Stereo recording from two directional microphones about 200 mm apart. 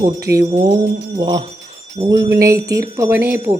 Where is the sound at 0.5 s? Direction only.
20° right (ahead or behind).